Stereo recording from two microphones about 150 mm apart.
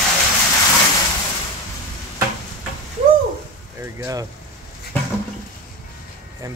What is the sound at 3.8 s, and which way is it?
Speech, 20° right (ahead or behind).